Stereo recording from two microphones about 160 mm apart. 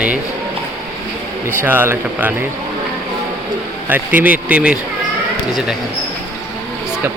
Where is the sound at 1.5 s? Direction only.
15° right (ahead or behind).